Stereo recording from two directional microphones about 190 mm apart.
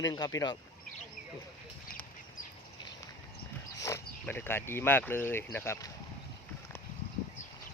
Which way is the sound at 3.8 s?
15° left (ahead or behind).